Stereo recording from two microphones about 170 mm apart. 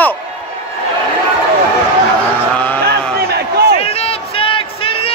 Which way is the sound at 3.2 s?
70° right (ahead or behind).